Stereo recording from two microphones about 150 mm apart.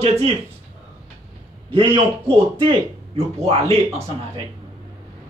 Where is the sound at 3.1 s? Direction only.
45° right (ahead or behind).